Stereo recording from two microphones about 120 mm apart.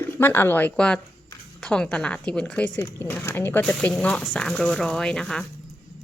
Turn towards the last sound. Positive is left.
turn(degrees=5)  # may be behind; listen again after turning